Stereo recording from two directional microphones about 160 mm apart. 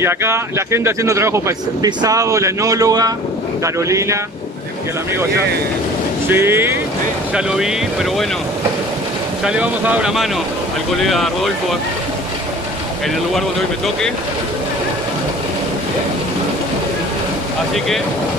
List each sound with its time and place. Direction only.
0.0 s speech: 15° right (ahead or behind)
6.2 s speech: 15° right (ahead or behind)
7.3 s speech: 5° right (ahead or behind)
9.4 s speech: 5° right (ahead or behind)
13.3 s speech: centre (ahead or behind)